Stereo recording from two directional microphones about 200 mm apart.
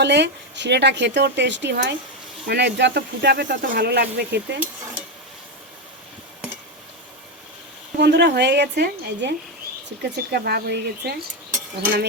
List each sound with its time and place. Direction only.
0.0 s speech: 60° right (ahead or behind)
7.9 s speech: 55° right (ahead or behind)